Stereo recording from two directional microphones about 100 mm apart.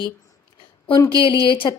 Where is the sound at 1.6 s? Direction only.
50° left (ahead or behind).